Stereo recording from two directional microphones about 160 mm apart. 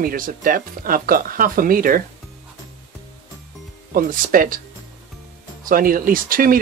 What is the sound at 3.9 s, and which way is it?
Speech, 60° right (ahead or behind).